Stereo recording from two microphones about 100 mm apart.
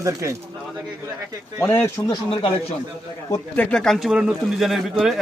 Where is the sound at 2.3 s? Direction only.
70° left (ahead or behind).